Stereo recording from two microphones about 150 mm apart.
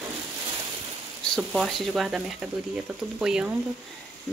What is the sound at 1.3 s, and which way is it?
Speech, centre (ahead or behind).